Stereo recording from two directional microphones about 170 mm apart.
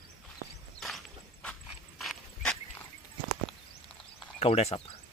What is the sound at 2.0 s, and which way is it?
Horse, centre (ahead or behind).